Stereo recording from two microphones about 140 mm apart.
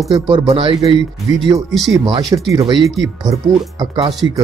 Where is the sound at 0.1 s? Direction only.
35° right (ahead or behind).